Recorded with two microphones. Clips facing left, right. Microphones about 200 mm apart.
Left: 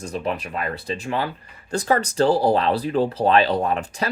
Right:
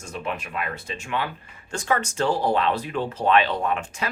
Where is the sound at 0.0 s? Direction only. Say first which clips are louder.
Left 5 dB; 35° left (ahead or behind).